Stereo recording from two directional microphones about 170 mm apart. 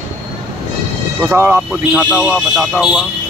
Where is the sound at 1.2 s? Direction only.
10° right (ahead or behind).